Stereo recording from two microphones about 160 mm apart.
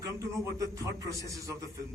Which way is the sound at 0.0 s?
20° right (ahead or behind).